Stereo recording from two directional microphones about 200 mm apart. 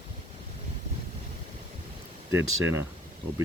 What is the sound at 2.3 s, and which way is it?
Speech, 10° right (ahead or behind).